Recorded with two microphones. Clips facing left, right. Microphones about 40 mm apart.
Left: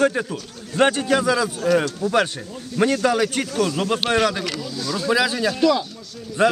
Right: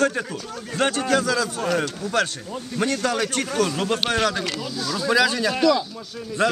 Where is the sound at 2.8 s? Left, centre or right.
Left.